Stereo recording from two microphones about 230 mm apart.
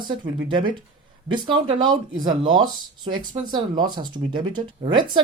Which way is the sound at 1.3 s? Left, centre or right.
Right.